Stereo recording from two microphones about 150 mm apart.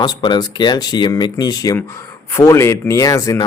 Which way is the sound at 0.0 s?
30° left (ahead or behind).